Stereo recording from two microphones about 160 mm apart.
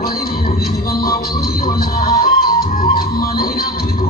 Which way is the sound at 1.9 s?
65° left (ahead or behind).